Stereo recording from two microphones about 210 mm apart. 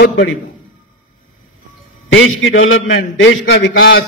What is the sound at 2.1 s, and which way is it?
A man's voice, 70° left (ahead or behind).